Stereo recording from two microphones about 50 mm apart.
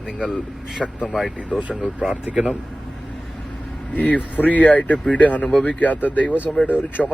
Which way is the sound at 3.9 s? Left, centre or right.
Left.